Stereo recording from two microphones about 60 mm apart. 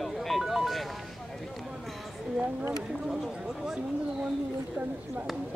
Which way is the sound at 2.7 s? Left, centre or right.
Centre.